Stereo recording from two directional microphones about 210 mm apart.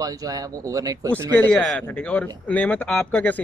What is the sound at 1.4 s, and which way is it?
A man's voice, 5° left (ahead or behind).